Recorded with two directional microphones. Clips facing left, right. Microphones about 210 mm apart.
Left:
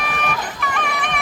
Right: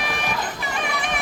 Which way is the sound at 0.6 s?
60° left (ahead or behind).